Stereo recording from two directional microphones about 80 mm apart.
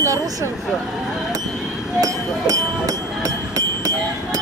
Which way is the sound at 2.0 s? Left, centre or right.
Right.